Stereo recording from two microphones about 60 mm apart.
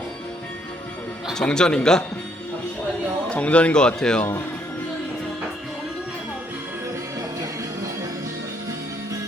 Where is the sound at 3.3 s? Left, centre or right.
Left.